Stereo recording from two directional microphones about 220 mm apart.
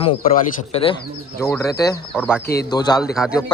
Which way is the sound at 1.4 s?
10° left (ahead or behind).